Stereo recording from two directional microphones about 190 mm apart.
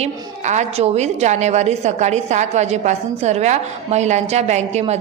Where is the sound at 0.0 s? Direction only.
40° right (ahead or behind).